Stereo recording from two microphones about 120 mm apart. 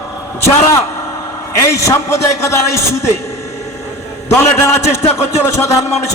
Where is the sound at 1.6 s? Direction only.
25° left (ahead or behind).